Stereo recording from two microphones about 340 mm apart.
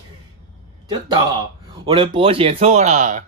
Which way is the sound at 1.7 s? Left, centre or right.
Centre.